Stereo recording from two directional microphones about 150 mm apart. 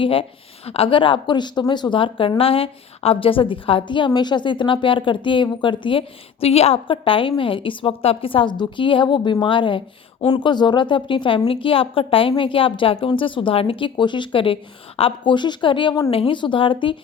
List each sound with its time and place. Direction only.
0.0 s a woman's voice: 35° left (ahead or behind)